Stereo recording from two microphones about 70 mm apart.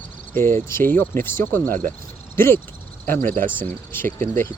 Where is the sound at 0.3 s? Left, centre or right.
Left.